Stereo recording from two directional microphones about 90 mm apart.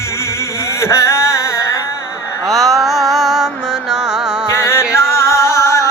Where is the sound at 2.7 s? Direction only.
Centre (ahead or behind).